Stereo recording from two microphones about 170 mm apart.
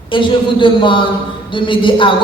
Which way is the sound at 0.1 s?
30° left (ahead or behind).